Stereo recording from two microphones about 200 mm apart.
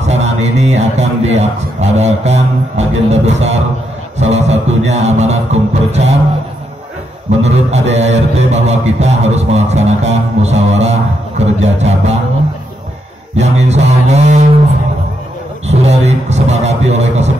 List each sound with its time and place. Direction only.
0.0 s a man's voice: 35° right (ahead or behind)
3.1 s mantra: 35° right (ahead or behind)
7.2 s mantra: 35° right (ahead or behind)
13.4 s mantra: 35° right (ahead or behind)
15.9 s mantra: 35° right (ahead or behind)